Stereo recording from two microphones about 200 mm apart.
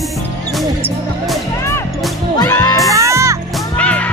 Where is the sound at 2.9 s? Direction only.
15° right (ahead or behind).